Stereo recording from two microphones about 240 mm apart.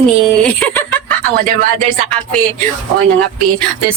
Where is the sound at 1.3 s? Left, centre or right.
Right.